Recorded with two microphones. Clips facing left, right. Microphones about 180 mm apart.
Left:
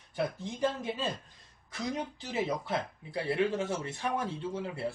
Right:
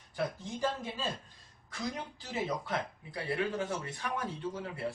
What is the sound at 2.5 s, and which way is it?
Speech, 25° left (ahead or behind).